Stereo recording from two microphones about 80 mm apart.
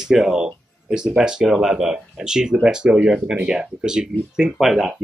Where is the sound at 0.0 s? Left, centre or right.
Centre.